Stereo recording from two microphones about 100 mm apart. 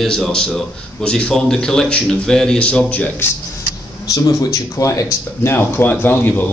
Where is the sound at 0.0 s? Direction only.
5° left (ahead or behind).